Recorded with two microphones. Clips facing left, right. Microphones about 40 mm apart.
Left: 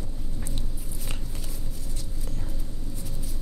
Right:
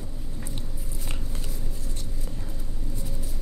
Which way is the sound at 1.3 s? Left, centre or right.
Right.